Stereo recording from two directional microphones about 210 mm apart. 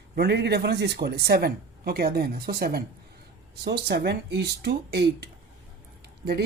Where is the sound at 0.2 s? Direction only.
55° right (ahead or behind).